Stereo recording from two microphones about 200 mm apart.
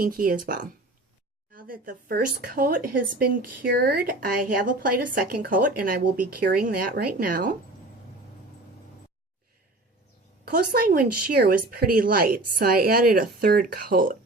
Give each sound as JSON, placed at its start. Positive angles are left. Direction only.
{"t": 0.0, "sound": "speech", "side_deg": -45}
{"t": 10.4, "sound": "speech", "side_deg": -45}